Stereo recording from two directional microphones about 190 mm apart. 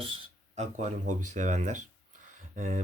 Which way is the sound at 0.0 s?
30° right (ahead or behind).